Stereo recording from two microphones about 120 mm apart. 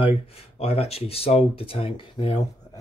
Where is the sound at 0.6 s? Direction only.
55° left (ahead or behind).